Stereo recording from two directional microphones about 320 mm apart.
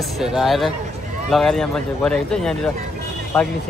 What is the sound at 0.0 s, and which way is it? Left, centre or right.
Speech, centre.